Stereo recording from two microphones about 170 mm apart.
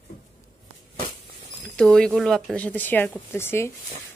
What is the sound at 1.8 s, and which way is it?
A woman's voice, 5° left (ahead or behind).